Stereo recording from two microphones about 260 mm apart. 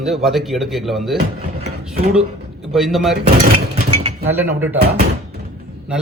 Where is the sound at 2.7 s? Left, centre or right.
Centre.